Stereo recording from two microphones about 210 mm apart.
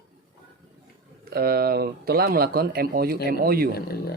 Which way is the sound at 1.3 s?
45° right (ahead or behind).